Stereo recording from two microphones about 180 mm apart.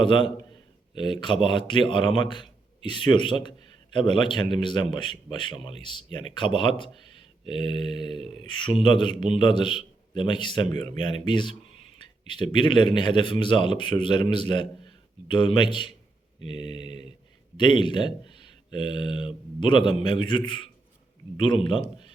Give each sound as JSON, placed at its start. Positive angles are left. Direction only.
{"t": 0.0, "sound": "a man's voice", "side_deg": 25}